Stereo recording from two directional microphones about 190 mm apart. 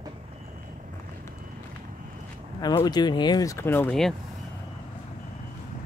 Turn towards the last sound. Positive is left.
turn(degrees=5)  # may be behind; listen again after turning